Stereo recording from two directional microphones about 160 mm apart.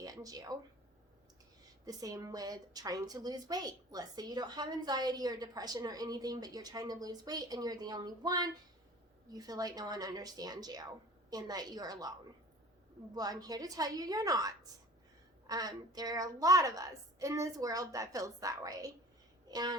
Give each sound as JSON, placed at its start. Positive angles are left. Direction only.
{"t": 0.0, "sound": "a sound", "side_deg": -20}
{"t": 1.8, "sound": "a woman's voice", "side_deg": -20}
{"t": 13.1, "sound": "a woman's voice", "side_deg": -25}